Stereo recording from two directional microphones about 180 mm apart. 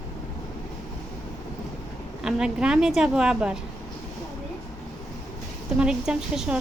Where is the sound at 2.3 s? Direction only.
5° right (ahead or behind).